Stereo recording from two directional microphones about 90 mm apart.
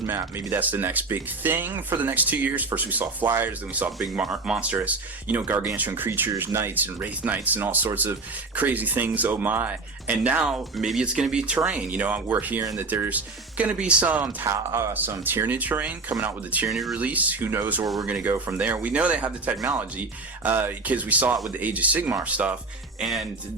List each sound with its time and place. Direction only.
0.1 s speech: 30° right (ahead or behind)
4.2 s speech: 5° right (ahead or behind)
14.4 s speech: 30° right (ahead or behind)
14.9 s speech: 20° right (ahead or behind)
16.6 s speech: centre (ahead or behind)
17.0 s speech: 15° right (ahead or behind)
23.0 s speech: centre (ahead or behind)